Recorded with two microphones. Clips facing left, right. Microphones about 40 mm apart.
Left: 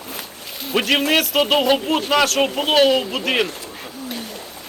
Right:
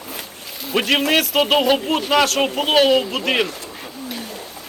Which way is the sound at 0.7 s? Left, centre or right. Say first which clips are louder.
Even; centre.